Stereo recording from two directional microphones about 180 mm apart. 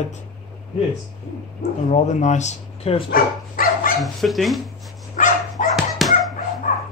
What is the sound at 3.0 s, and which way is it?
Dog, 50° left (ahead or behind).